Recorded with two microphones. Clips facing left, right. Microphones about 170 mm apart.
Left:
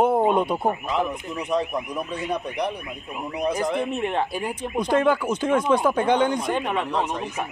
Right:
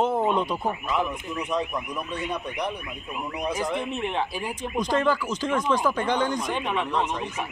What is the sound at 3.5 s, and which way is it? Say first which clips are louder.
Speech: left 4 dB; 60° left (ahead or behind).